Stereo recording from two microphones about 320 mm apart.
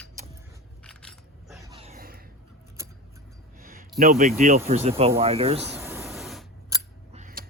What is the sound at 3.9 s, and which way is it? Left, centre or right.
Speech, right.